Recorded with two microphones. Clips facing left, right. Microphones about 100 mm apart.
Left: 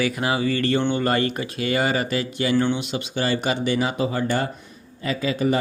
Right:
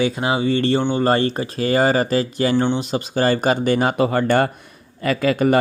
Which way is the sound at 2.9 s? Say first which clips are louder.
Right 5 dB; 45° right (ahead or behind).